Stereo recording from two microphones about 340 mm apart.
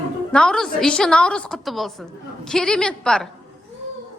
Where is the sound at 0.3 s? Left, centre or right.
Centre.